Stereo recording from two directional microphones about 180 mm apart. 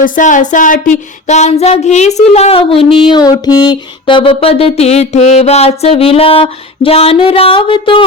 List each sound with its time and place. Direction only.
0.0 s music: 45° left (ahead or behind); by 8.0 s 30° left (ahead or behind)